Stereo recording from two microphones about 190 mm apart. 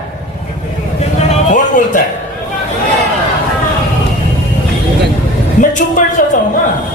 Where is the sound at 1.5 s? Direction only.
45° left (ahead or behind).